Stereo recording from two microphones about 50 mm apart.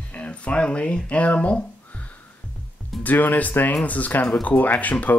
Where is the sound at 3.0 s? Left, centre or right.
Left.